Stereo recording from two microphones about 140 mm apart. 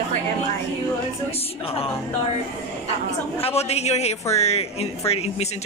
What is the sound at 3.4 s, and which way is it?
Speech, 45° left (ahead or behind).